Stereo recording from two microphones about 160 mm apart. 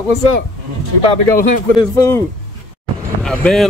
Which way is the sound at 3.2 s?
Centre (ahead or behind).